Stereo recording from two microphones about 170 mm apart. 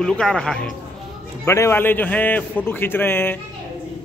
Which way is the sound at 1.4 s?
15° left (ahead or behind).